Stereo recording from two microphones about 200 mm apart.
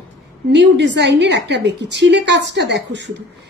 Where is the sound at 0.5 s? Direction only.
60° right (ahead or behind).